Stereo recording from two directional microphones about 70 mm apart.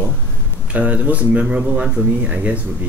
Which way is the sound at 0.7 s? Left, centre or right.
Centre.